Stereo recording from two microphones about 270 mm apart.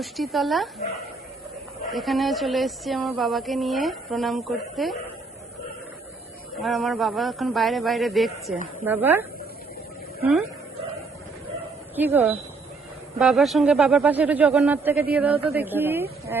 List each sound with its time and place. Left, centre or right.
0.0 s speech: centre
1.9 s speech: centre
6.6 s speech: centre
11.9 s speech: centre